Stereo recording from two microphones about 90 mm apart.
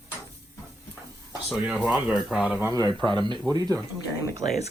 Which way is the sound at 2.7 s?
40° right (ahead or behind).